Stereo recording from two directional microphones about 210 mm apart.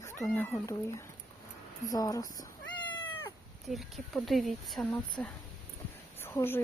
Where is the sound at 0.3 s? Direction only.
5° left (ahead or behind).